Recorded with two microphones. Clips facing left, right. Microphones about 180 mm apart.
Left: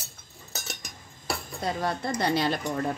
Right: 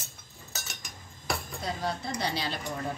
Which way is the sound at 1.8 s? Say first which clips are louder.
Left 5 dB; 55° left (ahead or behind).